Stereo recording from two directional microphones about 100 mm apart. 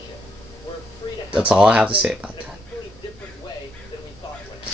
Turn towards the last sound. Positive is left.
turn(degrees=50)  # may be behind; listen again after turning